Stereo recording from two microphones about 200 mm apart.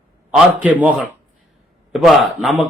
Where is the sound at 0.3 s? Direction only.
5° right (ahead or behind).